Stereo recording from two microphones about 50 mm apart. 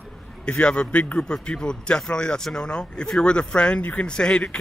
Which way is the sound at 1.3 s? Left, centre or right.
Centre.